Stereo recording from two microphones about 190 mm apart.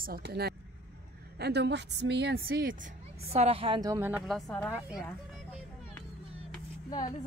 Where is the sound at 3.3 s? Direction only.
30° right (ahead or behind); by 4.2 s 15° right (ahead or behind).